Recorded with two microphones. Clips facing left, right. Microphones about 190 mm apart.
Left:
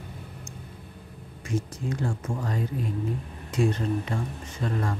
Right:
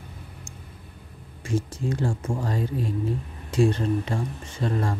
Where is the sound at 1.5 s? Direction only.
30° right (ahead or behind).